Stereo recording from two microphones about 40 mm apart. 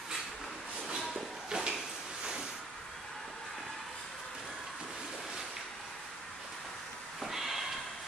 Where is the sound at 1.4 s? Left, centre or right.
Centre.